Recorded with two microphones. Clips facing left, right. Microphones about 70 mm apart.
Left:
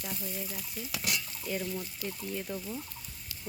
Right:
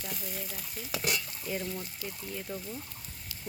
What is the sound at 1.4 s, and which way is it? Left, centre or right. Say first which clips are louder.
Speech: left 2 dB; centre.